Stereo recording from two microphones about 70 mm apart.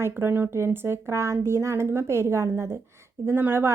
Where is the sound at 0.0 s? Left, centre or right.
Right.